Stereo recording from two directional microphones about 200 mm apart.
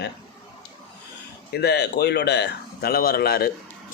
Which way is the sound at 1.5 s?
55° left (ahead or behind).